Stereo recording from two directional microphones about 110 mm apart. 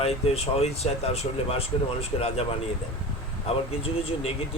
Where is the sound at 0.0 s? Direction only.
70° left (ahead or behind).